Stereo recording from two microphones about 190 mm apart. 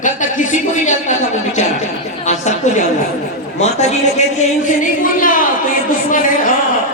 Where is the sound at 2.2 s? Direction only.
40° left (ahead or behind).